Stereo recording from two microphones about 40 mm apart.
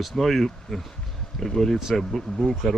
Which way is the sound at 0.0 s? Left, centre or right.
Centre.